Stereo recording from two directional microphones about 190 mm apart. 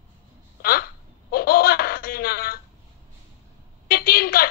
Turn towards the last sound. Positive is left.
turn(degrees=50)  # may be behind; listen again after turning